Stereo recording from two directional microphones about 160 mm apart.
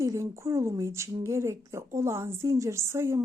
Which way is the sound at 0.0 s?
20° right (ahead or behind).